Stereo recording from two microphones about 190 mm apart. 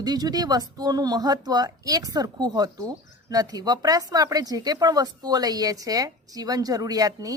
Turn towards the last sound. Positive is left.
turn(degrees=-20)  # may be behind; listen again after turning